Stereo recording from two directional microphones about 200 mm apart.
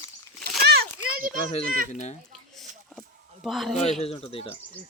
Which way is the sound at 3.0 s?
Centre (ahead or behind).